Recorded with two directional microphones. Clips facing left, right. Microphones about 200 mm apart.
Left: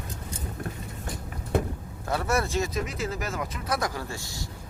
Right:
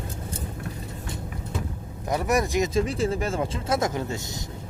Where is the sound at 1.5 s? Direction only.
60° left (ahead or behind).